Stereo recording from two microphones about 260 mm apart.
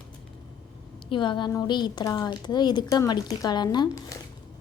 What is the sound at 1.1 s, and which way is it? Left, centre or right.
A woman's voice, centre.